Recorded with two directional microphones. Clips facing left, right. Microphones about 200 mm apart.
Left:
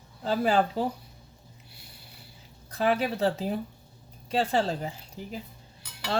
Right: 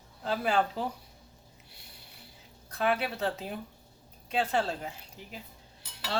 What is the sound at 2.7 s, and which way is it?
Speech, 35° left (ahead or behind).